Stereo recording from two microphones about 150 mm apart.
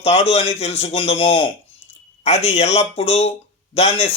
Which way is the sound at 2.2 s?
45° left (ahead or behind).